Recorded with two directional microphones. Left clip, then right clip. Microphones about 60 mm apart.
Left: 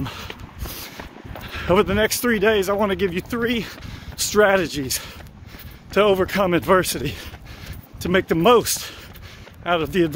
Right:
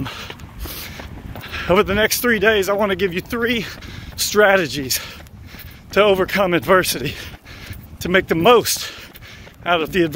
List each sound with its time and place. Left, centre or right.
0.0 s a sound: left
0.7 s a sound: left
1.4 s speech: centre
2.8 s speech: centre
3.8 s speech: left
6.8 s speech: left
8.0 s speech: left